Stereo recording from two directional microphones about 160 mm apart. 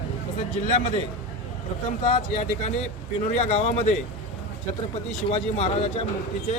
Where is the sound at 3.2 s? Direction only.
45° left (ahead or behind).